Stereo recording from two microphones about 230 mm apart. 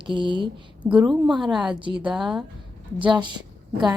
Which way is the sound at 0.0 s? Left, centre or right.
Right.